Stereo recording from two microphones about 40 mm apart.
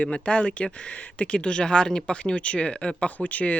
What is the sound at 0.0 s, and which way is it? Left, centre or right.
Speech, left.